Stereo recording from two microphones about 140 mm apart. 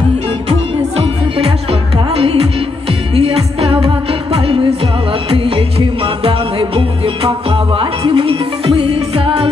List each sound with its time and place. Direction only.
0.5 s music: 40° right (ahead or behind)